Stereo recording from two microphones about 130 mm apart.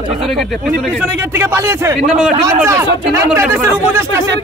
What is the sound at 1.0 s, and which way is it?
Speech, 20° right (ahead or behind).